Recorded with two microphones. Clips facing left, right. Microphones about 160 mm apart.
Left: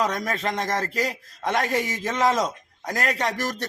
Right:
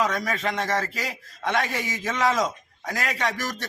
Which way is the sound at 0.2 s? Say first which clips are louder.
Left 1 dB; 35° left (ahead or behind).